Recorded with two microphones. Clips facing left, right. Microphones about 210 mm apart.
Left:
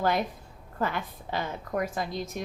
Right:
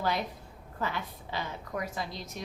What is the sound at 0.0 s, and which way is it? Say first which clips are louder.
A woman's voice: left 5 dB; 50° left (ahead or behind).